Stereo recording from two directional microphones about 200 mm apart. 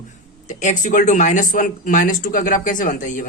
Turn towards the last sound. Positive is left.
turn(degrees=40)  # may be behind; listen again after turning